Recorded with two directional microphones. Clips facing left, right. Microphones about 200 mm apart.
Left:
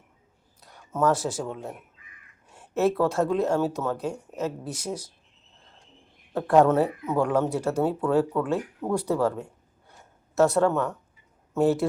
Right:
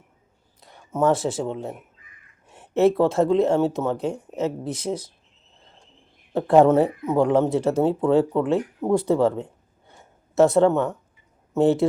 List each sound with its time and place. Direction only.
0.6 s speech: 25° right (ahead or behind)
6.3 s speech: 25° right (ahead or behind)